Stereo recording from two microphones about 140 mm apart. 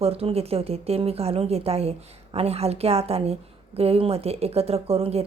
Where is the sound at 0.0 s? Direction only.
45° right (ahead or behind).